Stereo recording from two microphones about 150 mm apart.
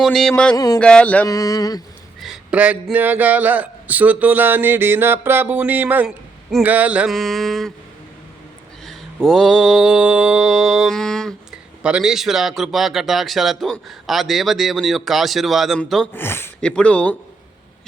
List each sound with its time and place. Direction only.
0.0 s mantra: centre (ahead or behind)
0.5 s a sound: 25° left (ahead or behind)
0.8 s speech: 5° left (ahead or behind)
1.3 s a sound: 25° left (ahead or behind)
2.2 s speech: 5° right (ahead or behind)
6.5 s mantra: 10° right (ahead or behind)
9.2 s mantra: centre (ahead or behind)
16.1 s speech: 15° left (ahead or behind)